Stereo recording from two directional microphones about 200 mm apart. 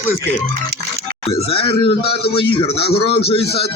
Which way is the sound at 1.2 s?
30° left (ahead or behind).